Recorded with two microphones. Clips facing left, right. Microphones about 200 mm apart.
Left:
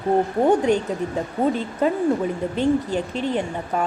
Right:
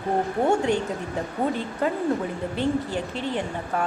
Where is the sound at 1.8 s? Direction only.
15° left (ahead or behind).